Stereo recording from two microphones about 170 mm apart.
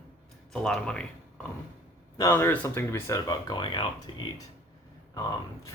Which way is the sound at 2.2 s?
15° left (ahead or behind).